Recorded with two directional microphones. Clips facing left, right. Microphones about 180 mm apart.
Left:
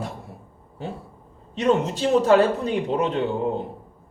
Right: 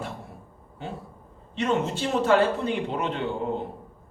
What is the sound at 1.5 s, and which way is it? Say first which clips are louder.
Speech: left 4 dB; 40° left (ahead or behind).